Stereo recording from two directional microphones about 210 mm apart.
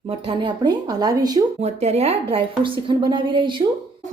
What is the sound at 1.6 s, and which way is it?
A woman's voice, 30° right (ahead or behind).